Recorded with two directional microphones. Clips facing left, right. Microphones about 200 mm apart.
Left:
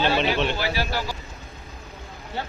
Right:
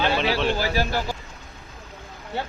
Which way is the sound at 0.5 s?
45° right (ahead or behind).